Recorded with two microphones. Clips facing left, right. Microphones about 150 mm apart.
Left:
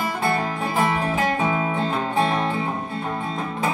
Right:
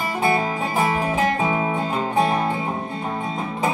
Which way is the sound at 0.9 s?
15° right (ahead or behind).